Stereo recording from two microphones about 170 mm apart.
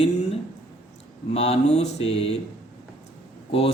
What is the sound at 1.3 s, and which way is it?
Speech, 40° left (ahead or behind).